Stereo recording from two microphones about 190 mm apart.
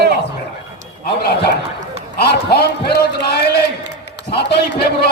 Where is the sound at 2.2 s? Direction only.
55° left (ahead or behind).